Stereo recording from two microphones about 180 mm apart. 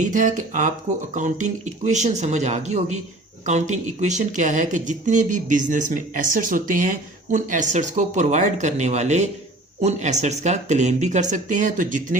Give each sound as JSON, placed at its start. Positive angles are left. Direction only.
{"t": 0.0, "sound": "speech", "side_deg": -45}